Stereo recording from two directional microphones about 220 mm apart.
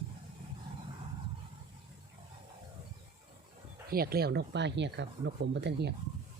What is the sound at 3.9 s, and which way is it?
Speech, 45° right (ahead or behind).